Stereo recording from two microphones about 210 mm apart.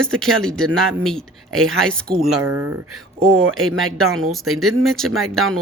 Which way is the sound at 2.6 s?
90° right.